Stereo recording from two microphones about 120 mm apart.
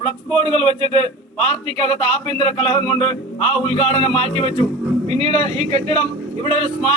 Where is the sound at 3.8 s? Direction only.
55° right (ahead or behind).